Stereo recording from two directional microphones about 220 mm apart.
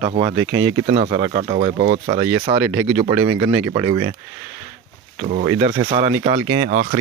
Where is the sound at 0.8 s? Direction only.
30° right (ahead or behind).